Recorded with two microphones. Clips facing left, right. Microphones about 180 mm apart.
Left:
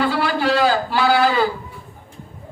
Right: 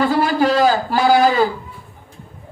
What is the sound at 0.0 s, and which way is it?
A man's voice, 45° right (ahead or behind).